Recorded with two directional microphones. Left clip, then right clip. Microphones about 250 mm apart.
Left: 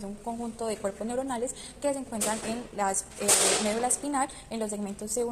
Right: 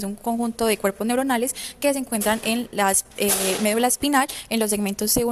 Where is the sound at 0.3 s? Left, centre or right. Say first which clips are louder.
Right 11 dB; right.